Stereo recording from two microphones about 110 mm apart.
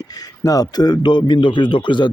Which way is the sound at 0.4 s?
35° left (ahead or behind).